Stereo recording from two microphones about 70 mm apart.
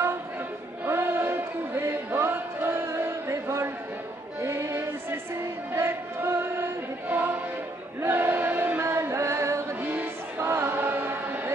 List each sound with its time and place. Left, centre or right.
0.8 s music: right
5.8 s chant: right
7.1 s choir: right
10.4 s chant: right